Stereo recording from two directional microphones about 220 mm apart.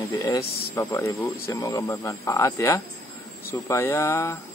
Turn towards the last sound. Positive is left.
turn(degrees=15)  # may be behind; listen again after turning